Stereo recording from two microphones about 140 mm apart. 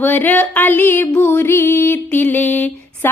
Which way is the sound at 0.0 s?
15° left (ahead or behind).